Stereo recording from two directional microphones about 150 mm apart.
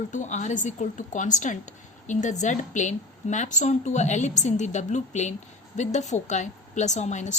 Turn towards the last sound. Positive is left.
turn(degrees=50)  # may be behind; listen again after turning